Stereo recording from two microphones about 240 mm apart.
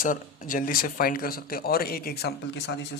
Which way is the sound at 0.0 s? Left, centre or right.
Left.